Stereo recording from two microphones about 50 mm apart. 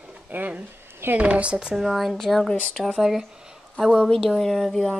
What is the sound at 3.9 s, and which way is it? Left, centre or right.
Speech, centre.